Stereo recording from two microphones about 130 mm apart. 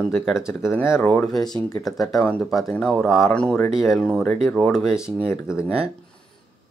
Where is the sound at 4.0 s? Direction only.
10° left (ahead or behind).